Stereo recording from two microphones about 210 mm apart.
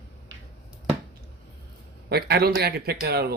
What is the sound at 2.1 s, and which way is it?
Speech, 50° right (ahead or behind).